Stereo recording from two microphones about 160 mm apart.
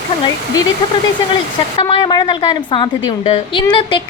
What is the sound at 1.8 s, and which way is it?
A woman's voice, 30° left (ahead or behind).